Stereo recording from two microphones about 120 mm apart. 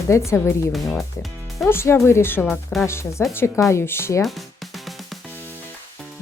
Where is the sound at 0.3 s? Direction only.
25° left (ahead or behind).